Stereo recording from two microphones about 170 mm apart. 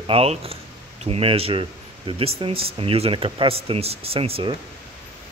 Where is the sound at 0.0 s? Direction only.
35° right (ahead or behind).